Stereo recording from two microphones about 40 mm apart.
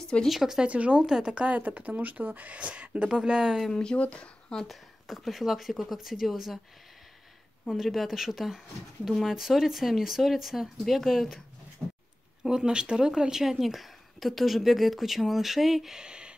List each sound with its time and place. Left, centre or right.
0.3 s speech: centre
0.7 s speech: right
1.0 s speech: centre
1.3 s speech: right
2.6 s speech: right
3.1 s speech: centre
3.9 s speech: left
4.6 s speech: centre
7.7 s speech: centre
12.4 s speech: right